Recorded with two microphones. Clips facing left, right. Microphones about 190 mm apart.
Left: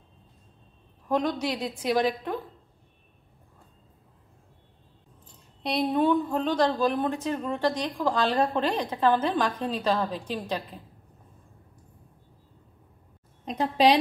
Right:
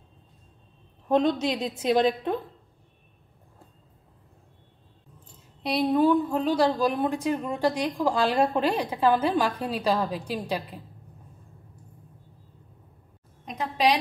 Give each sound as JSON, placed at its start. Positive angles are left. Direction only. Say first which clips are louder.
{"t": 1.0, "sound": "a woman's voice", "louder": "right 4 dB", "side_deg": -25}
{"t": 5.6, "sound": "a woman's voice", "louder": "right 2 dB", "side_deg": 0}
{"t": 13.5, "sound": "a woman's voice", "louder": "left 3 dB", "side_deg": 30}